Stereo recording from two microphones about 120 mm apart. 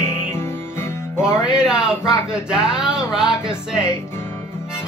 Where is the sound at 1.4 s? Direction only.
5° right (ahead or behind).